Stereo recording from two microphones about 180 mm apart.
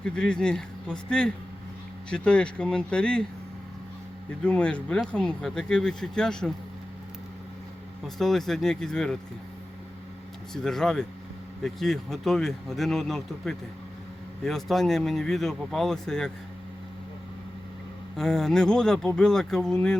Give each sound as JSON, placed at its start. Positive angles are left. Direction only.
{"t": 0.0, "sound": "speech", "side_deg": 5}
{"t": 4.4, "sound": "speech", "side_deg": 5}
{"t": 8.0, "sound": "speech", "side_deg": 0}
{"t": 10.5, "sound": "speech", "side_deg": 0}
{"t": 18.2, "sound": "speech", "side_deg": 0}